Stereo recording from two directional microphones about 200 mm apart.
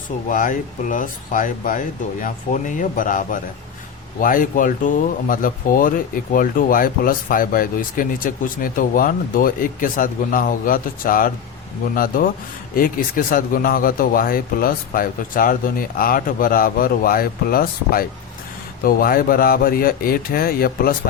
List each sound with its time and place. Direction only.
0.3 s speech: 40° left (ahead or behind)